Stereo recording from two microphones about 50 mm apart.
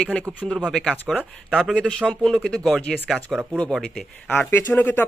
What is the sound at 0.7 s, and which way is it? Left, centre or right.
Speech, centre.